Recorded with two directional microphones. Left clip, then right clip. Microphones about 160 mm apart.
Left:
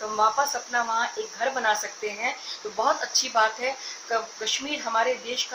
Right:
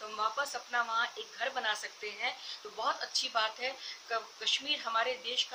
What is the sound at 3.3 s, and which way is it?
Speech, 10° right (ahead or behind).